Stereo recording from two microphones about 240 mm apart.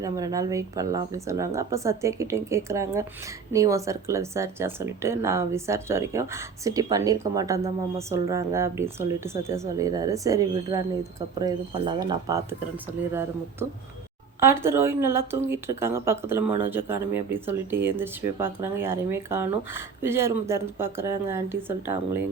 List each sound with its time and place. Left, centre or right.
0.0 s speech: centre
14.4 s speech: centre